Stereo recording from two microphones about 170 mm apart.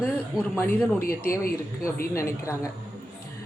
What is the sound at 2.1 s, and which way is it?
Speech, 15° left (ahead or behind).